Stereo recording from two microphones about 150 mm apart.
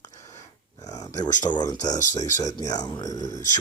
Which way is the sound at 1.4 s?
30° left (ahead or behind).